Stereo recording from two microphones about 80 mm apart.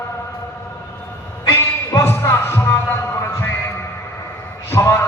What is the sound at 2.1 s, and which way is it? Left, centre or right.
Music, left.